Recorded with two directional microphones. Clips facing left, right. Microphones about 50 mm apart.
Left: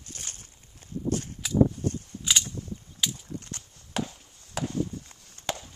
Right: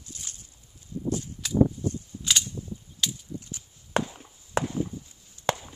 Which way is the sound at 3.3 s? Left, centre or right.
Left.